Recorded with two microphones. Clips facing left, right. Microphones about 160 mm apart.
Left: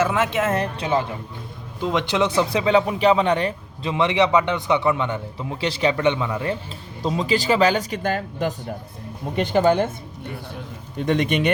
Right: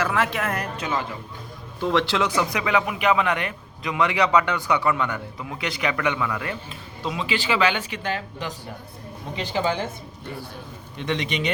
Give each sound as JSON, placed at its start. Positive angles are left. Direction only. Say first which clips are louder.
{"t": 0.0, "sound": "speech", "louder": "left 4 dB", "side_deg": 20}
{"t": 1.8, "sound": "speech", "louder": "left 1 dB", "side_deg": 20}
{"t": 7.0, "sound": "speech", "louder": "left 5 dB", "side_deg": 40}
{"t": 10.9, "sound": "speech", "louder": "left 6 dB", "side_deg": 45}